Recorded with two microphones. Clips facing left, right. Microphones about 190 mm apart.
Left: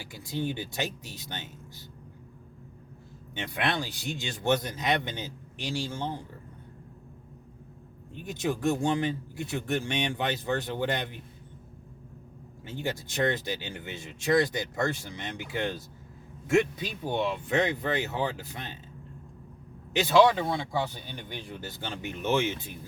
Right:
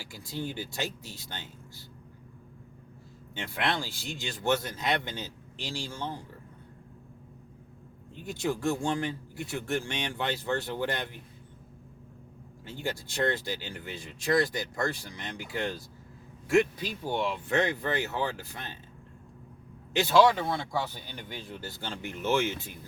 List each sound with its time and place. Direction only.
0.1 s speech: 20° left (ahead or behind)
3.3 s speech: 20° left (ahead or behind)
8.1 s speech: 20° left (ahead or behind)
12.6 s speech: 20° left (ahead or behind)
20.0 s speech: 20° left (ahead or behind)